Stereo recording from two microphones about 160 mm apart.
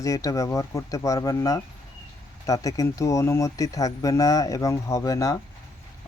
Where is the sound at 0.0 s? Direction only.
20° left (ahead or behind).